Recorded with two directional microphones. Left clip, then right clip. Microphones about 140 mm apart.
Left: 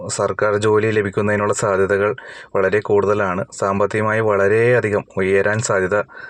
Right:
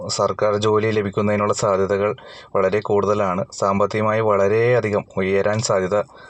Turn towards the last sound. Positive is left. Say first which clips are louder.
# left 1 dB
turn(degrees=20)  # may be behind; listen again after turning